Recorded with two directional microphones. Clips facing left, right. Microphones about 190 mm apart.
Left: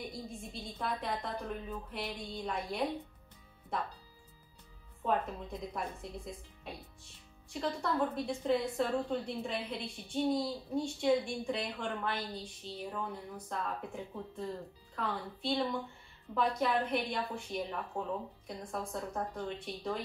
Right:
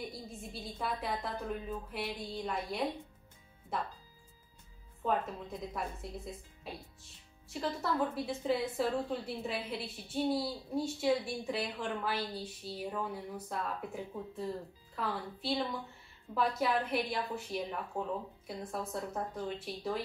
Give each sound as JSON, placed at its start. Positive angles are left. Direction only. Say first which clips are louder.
{"t": 0.4, "sound": "a woman's voice", "louder": "right 4 dB", "side_deg": -5}
{"t": 5.0, "sound": "a woman's voice", "louder": "even", "side_deg": 0}